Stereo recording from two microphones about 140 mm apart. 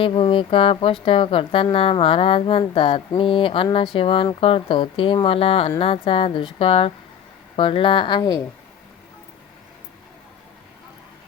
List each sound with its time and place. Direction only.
0.0 s speech: 40° left (ahead or behind)